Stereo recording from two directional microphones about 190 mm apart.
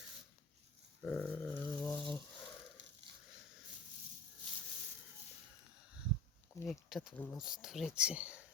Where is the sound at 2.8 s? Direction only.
75° right (ahead or behind).